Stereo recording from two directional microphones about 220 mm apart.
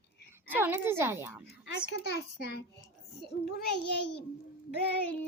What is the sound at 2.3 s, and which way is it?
Speech, 50° left (ahead or behind).